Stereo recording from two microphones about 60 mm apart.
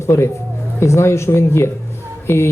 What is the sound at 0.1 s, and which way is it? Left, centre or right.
A woman's voice, left.